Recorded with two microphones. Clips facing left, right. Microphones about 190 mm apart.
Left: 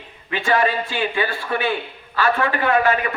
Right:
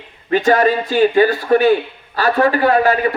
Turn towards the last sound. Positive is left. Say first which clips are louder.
# right 5 dB
turn(degrees=-35)  # may be behind; listen again after turning